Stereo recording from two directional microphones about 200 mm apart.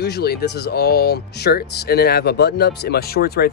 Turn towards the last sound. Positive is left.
turn(degrees=50)  # may be behind; listen again after turning